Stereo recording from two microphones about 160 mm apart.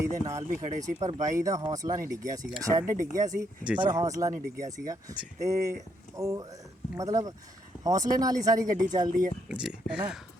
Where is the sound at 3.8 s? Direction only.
25° right (ahead or behind).